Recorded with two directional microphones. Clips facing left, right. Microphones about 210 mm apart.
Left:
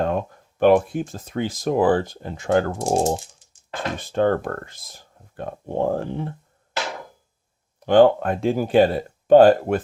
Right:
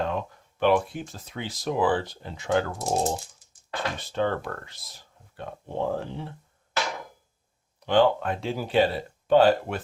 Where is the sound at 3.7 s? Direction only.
50° left (ahead or behind).